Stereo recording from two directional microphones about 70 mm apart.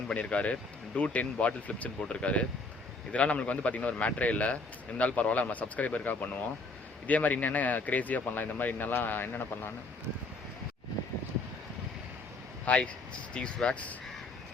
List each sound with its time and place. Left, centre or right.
0.1 s speech: centre
12.6 s speech: centre